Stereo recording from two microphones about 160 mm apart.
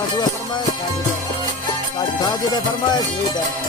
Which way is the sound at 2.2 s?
25° left (ahead or behind).